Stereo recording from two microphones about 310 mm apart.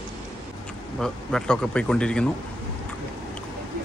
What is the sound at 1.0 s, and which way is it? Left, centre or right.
Speech, centre.